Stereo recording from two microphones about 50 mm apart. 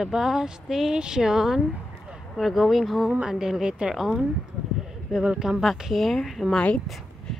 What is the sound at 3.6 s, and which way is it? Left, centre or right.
Speech, centre.